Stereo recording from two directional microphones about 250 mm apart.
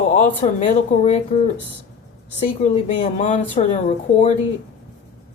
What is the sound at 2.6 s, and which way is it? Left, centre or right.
A woman's voice, left.